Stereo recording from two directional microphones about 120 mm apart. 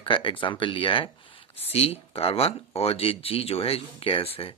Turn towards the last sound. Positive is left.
turn(degrees=50)  # may be behind; listen again after turning